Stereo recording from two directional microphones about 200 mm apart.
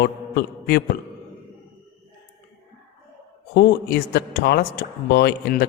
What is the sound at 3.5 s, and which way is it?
A man's voice, 55° left (ahead or behind).